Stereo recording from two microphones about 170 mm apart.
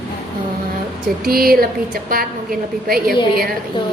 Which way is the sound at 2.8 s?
60° right (ahead or behind).